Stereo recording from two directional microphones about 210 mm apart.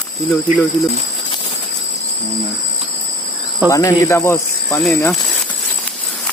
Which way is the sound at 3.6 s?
15° left (ahead or behind).